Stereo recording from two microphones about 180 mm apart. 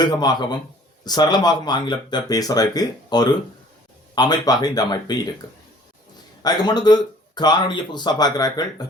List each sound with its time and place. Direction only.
0.0 s speech: 25° left (ahead or behind)
6.4 s speech: 25° left (ahead or behind)